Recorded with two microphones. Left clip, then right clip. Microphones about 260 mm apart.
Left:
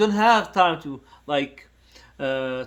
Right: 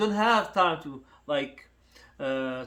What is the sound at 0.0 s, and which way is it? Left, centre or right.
Speech, left.